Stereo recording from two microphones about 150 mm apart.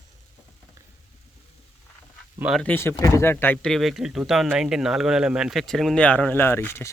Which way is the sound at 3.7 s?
Centre (ahead or behind).